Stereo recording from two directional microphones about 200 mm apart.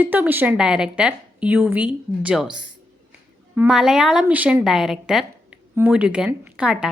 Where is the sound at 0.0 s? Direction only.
10° right (ahead or behind).